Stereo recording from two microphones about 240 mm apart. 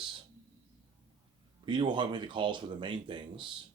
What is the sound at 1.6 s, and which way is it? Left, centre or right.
Speech, centre.